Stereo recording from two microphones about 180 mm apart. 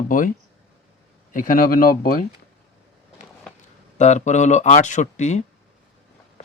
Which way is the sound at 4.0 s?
40° left (ahead or behind).